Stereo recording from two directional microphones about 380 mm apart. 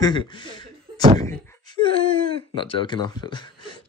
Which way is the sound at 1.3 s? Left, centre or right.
Centre.